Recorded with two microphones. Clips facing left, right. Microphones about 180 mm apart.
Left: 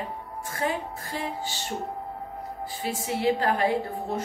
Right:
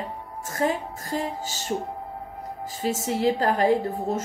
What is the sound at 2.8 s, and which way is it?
Speech, 40° right (ahead or behind).